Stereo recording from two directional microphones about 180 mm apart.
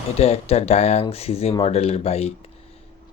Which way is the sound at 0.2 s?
35° left (ahead or behind).